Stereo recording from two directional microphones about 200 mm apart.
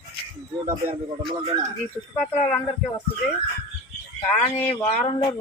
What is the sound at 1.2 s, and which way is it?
Speech, 25° right (ahead or behind).